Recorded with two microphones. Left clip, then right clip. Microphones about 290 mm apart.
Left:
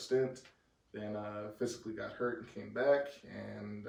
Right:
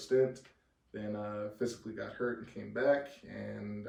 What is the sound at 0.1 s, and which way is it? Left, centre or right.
A man's voice, centre.